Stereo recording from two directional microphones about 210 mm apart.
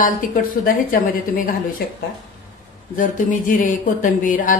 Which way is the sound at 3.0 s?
40° left (ahead or behind).